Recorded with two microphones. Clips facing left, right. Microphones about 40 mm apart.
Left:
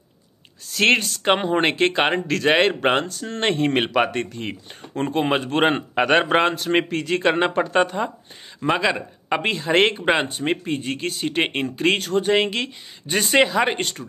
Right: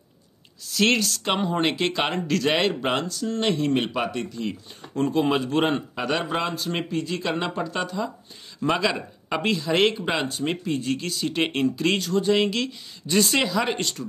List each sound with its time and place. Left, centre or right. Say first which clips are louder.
0.7 s speech: left 3 dB; left
2.7 s speech: left 5 dB; left
8.6 s speech: left 3 dB; left